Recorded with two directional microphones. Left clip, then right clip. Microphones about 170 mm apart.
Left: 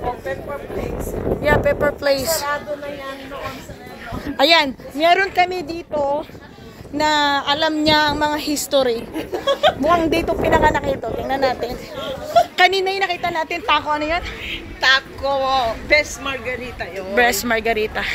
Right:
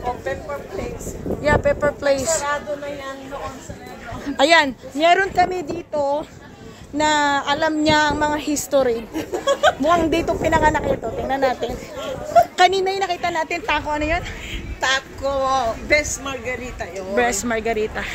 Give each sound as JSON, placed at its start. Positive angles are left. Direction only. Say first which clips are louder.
{"t": 1.4, "sound": "speech", "louder": "left 1 dB", "side_deg": -5}
{"t": 4.4, "sound": "speech", "louder": "even", "side_deg": -20}
{"t": 7.0, "sound": "speech", "louder": "left 1 dB", "side_deg": -15}
{"t": 9.1, "sound": "speech", "louder": "even", "side_deg": -90}
{"t": 9.8, "sound": "speech", "louder": "left 1 dB", "side_deg": -20}
{"t": 14.8, "sound": "speech", "louder": "left 5 dB", "side_deg": -75}
{"t": 17.1, "sound": "speech", "louder": "left 3 dB", "side_deg": -10}